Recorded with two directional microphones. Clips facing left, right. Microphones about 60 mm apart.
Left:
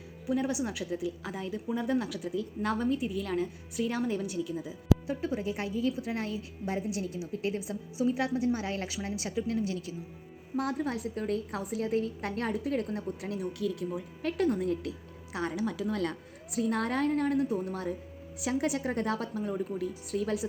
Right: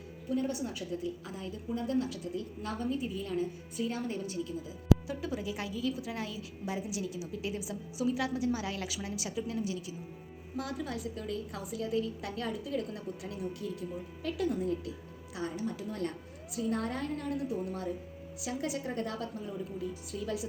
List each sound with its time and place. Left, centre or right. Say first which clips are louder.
0.3 s a woman's voice: left 3 dB; left
2.9 s a woman's voice: left 3 dB; left
5.0 s a woman's voice: left 4 dB; left
14.2 s a woman's voice: left 4 dB; left
16.6 s a woman's voice: left 4 dB; left